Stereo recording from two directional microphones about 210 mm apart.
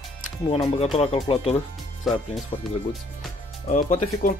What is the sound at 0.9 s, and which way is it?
Speech, 30° left (ahead or behind).